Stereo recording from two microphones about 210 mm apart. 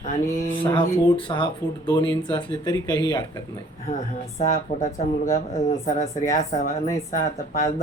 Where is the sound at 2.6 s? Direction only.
20° left (ahead or behind).